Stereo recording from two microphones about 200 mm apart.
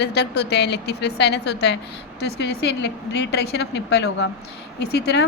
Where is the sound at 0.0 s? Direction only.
55° left (ahead or behind).